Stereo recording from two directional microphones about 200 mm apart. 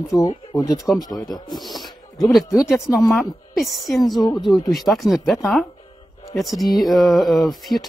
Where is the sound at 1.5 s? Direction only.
Centre (ahead or behind).